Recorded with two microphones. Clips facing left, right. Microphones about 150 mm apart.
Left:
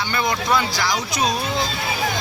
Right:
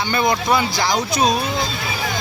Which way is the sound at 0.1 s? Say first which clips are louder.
Right 3 dB; 20° right (ahead or behind).